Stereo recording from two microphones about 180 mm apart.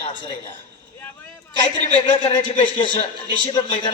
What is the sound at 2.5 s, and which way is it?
Speech, 25° left (ahead or behind).